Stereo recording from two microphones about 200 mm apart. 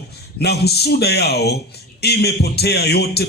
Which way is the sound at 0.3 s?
55° left (ahead or behind).